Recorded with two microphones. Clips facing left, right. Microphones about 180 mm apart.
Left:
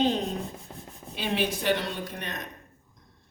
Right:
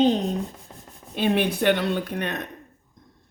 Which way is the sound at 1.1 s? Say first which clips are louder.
Right 7 dB; 55° right (ahead or behind).